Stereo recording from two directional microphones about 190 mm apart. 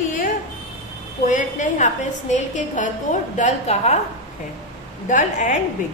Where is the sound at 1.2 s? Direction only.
40° left (ahead or behind).